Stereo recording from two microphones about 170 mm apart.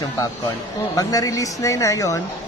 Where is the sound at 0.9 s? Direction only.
20° left (ahead or behind).